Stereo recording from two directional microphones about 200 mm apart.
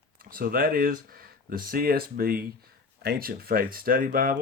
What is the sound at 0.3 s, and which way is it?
Speech, 45° right (ahead or behind).